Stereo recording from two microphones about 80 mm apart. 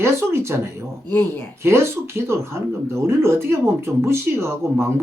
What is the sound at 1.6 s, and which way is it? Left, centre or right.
Speech, right.